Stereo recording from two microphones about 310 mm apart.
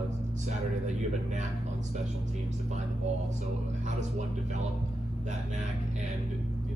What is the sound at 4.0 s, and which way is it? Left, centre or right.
Speech, right.